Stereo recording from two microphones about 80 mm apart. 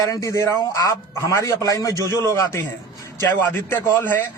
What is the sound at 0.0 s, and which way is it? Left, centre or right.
Speech, left.